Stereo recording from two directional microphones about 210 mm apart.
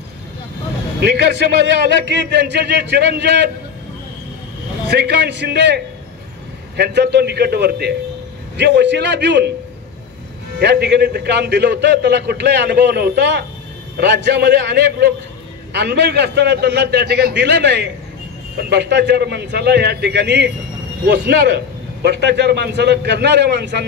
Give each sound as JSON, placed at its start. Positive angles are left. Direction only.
{"t": 1.8, "sound": "a man's voice", "side_deg": -55}
{"t": 4.8, "sound": "a man's voice", "side_deg": -55}
{"t": 6.8, "sound": "a man's voice", "side_deg": -55}
{"t": 10.6, "sound": "a man's voice", "side_deg": -50}